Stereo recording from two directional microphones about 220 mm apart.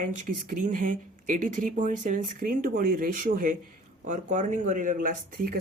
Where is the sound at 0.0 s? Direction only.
40° right (ahead or behind).